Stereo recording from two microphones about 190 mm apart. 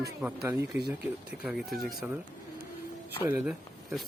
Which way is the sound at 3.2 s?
10° right (ahead or behind).